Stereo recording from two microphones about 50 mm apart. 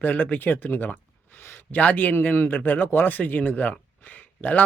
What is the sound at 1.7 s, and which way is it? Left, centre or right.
Speech, left.